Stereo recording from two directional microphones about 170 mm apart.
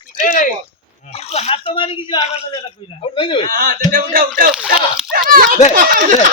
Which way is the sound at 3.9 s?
55° right (ahead or behind).